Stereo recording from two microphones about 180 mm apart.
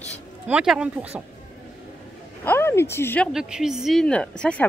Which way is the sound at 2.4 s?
10° left (ahead or behind).